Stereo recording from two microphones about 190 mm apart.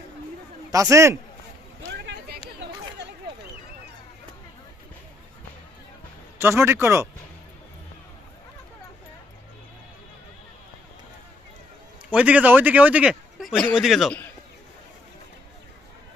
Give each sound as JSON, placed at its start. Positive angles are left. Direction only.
{"t": 0.7, "sound": "speech", "side_deg": -15}
{"t": 1.9, "sound": "a sound", "side_deg": -60}
{"t": 6.4, "sound": "speech", "side_deg": -10}
{"t": 12.1, "sound": "a man's voice", "side_deg": -5}